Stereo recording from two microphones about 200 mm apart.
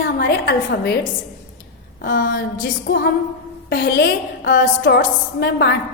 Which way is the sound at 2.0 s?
45° left (ahead or behind).